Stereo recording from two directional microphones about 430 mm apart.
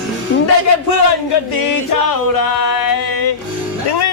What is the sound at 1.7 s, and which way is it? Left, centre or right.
Music, left.